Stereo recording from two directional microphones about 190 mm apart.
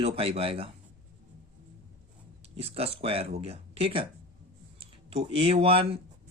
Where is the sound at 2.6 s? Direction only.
30° right (ahead or behind).